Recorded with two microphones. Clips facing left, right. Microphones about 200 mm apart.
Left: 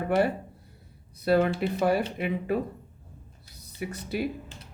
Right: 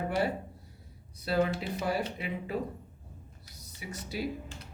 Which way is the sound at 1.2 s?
60° left (ahead or behind).